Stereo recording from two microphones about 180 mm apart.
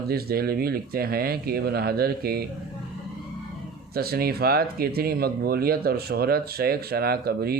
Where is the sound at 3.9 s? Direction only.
60° right (ahead or behind).